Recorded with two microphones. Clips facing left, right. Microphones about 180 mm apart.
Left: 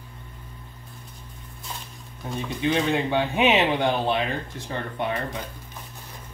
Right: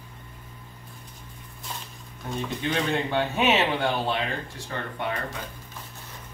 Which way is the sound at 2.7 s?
15° left (ahead or behind).